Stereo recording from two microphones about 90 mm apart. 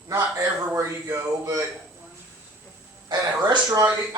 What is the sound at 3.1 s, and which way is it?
Speech, 50° right (ahead or behind).